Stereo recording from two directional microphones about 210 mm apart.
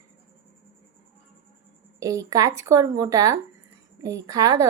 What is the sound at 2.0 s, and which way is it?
A woman's voice, 15° right (ahead or behind).